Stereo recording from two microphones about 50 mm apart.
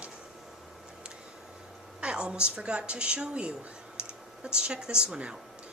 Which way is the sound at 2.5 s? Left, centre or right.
Right.